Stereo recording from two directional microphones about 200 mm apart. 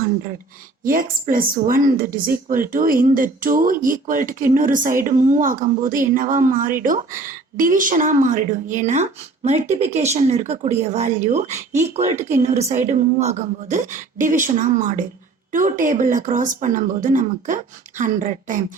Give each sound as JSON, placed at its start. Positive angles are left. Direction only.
{"t": 0.9, "sound": "a woman's voice", "side_deg": -45}